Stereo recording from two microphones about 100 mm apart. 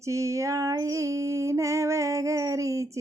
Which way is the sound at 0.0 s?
30° right (ahead or behind).